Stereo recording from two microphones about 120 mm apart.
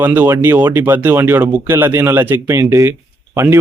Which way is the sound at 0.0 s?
15° right (ahead or behind).